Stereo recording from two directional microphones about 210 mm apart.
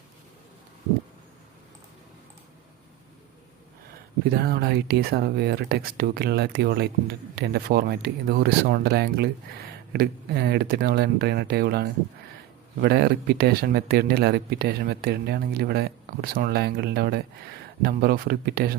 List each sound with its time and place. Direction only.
4.3 s speech: 45° right (ahead or behind)